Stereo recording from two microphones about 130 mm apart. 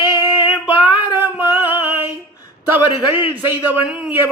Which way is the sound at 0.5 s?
10° right (ahead or behind).